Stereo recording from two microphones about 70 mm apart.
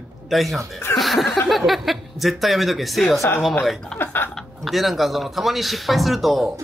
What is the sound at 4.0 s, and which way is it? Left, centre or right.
Speech, left.